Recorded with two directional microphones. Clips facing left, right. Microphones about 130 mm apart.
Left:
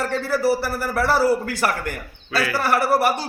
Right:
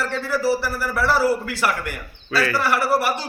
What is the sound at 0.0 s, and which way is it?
A man's voice, 55° left (ahead or behind).